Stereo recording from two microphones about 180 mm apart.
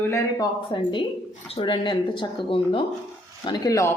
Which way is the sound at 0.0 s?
20° left (ahead or behind).